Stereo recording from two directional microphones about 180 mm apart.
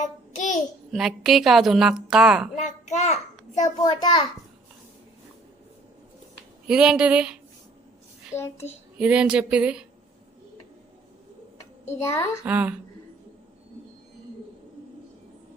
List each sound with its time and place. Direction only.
0.0 s child singing: 45° left (ahead or behind)
0.9 s a woman's voice: centre (ahead or behind)
2.6 s a child's voice: 40° left (ahead or behind)
3.8 s a child's voice: 25° left (ahead or behind)
6.7 s a woman's voice: 5° right (ahead or behind)
8.3 s a child's voice: 15° left (ahead or behind)
9.0 s speech: 5° right (ahead or behind)
11.9 s a child's voice: 15° left (ahead or behind)
12.5 s speech: 10° right (ahead or behind)